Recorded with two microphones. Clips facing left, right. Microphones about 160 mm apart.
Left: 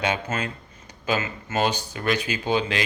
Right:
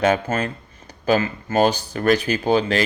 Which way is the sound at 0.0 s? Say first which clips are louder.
Right 7 dB; 45° right (ahead or behind).